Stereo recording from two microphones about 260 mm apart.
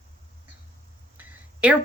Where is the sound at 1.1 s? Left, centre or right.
Centre.